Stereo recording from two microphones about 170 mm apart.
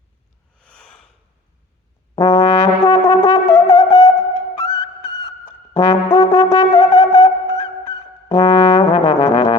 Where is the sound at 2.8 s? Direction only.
25° left (ahead or behind).